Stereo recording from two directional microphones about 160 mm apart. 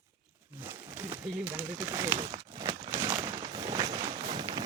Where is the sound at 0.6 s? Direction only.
15° right (ahead or behind).